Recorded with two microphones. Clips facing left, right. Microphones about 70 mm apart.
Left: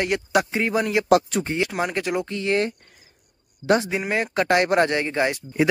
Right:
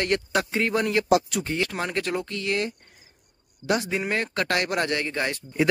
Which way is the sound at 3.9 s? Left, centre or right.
Centre.